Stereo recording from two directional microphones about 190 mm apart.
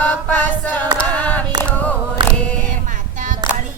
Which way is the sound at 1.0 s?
5° left (ahead or behind).